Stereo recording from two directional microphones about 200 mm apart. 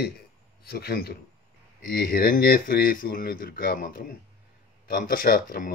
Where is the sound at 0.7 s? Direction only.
50° left (ahead or behind).